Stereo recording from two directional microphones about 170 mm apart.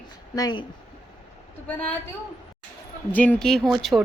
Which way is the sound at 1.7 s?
10° left (ahead or behind).